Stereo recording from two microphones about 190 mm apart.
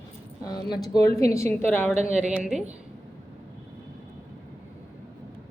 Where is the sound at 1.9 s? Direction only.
35° right (ahead or behind).